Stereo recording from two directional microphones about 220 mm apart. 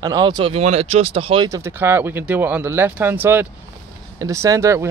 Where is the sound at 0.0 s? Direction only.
20° right (ahead or behind).